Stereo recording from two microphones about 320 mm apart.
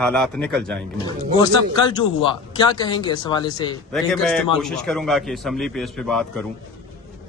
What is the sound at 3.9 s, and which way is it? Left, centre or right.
A man's voice, centre.